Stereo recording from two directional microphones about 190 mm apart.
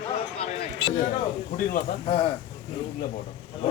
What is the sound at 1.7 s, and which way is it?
Speech, 45° left (ahead or behind).